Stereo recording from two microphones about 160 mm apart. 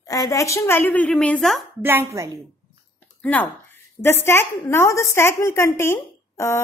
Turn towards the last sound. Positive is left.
turn(degrees=15)  # may be behind; listen again after turning